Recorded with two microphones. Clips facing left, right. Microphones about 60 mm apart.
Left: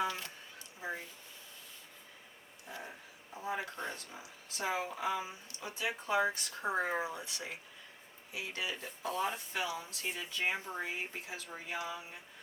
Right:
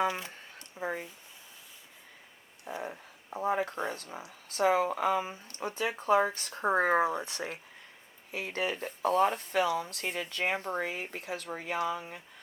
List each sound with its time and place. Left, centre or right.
0.8 s speech: right
2.8 s speech: right